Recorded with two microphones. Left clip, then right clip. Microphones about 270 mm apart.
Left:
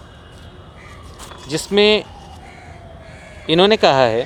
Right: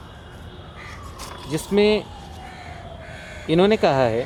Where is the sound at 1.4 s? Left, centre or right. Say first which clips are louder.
Left 5 dB; left.